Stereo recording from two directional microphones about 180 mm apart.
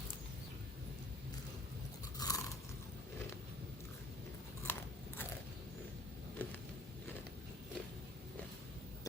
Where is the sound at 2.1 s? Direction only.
20° left (ahead or behind).